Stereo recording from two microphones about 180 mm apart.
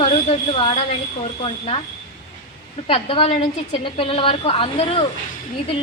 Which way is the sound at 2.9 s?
30° left (ahead or behind).